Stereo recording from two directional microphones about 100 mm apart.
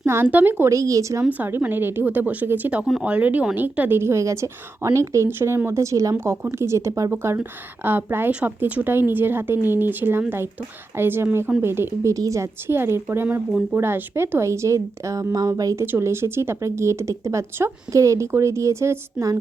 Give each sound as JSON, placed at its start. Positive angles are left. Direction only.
{"t": 0.0, "sound": "a woman's voice", "side_deg": -25}
{"t": 0.6, "sound": "speech", "side_deg": -30}
{"t": 1.2, "sound": "a woman's voice", "side_deg": -15}
{"t": 12.1, "sound": "a woman's voice", "side_deg": -35}